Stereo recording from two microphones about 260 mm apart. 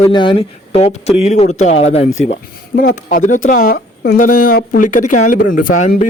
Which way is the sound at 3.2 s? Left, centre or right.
Left.